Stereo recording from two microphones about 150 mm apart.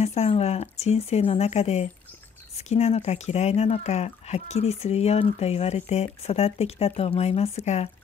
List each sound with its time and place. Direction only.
0.0 s speech: 45° left (ahead or behind)